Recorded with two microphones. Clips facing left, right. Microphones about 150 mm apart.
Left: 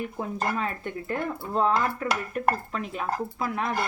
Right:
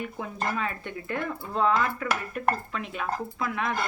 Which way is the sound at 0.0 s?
40° left (ahead or behind).